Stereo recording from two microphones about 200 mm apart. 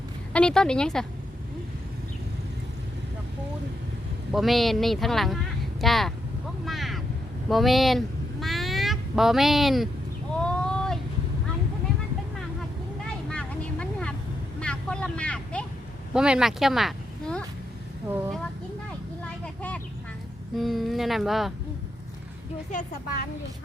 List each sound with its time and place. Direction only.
0.3 s speech: 5° left (ahead or behind)
4.3 s speech: centre (ahead or behind)
6.7 s a sound: centre (ahead or behind)
7.5 s speech: centre (ahead or behind)
10.4 s a sound: 5° left (ahead or behind)
13.2 s vehicle: 5° left (ahead or behind)
16.1 s speech: 5° right (ahead or behind)
20.6 s speech: centre (ahead or behind)
22.7 s a woman's voice: 40° left (ahead or behind)